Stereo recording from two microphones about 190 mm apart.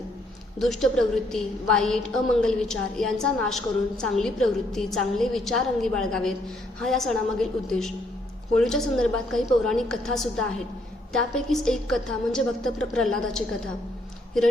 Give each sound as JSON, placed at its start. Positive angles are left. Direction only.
{"t": 0.6, "sound": "a woman's voice", "side_deg": 0}